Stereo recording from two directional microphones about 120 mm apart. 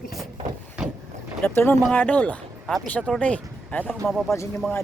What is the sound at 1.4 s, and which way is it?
Speech, 15° left (ahead or behind).